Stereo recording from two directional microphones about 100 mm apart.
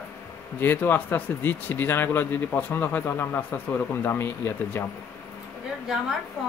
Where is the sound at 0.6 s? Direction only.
20° left (ahead or behind).